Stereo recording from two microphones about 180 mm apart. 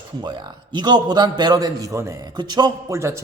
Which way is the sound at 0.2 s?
25° right (ahead or behind).